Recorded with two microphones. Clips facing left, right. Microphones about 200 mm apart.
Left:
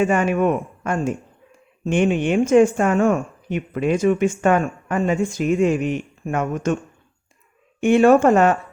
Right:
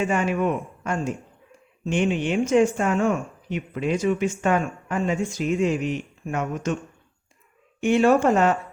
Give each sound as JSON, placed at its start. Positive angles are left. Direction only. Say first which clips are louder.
{"t": 0.0, "sound": "speech", "louder": "left 5 dB", "side_deg": 55}
{"t": 7.8, "sound": "speech", "louder": "left 5 dB", "side_deg": 55}